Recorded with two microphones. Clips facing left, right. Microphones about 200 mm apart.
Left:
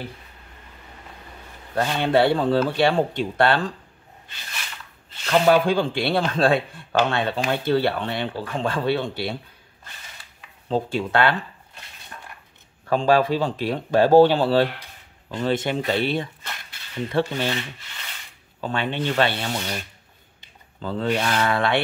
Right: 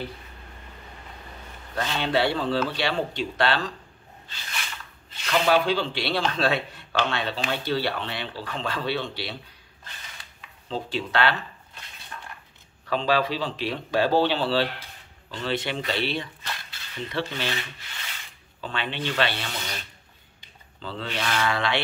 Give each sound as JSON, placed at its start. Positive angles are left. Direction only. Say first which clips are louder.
{"t": 1.8, "sound": "speech", "louder": "left 5 dB", "side_deg": 50}
{"t": 5.2, "sound": "speech", "louder": "left 4 dB", "side_deg": 50}
{"t": 10.7, "sound": "speech", "louder": "left 6 dB", "side_deg": 50}
{"t": 12.8, "sound": "speech", "louder": "left 5 dB", "side_deg": 50}
{"t": 18.6, "sound": "speech", "louder": "left 5 dB", "side_deg": 45}
{"t": 20.8, "sound": "speech", "louder": "left 8 dB", "side_deg": 45}